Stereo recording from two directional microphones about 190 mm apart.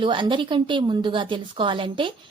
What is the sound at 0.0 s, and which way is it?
A woman's voice, 25° right (ahead or behind).